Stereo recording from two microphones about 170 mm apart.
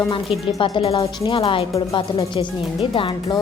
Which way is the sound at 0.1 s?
30° left (ahead or behind).